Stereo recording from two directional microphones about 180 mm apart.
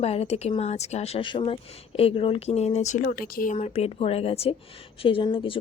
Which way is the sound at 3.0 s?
50° left (ahead or behind).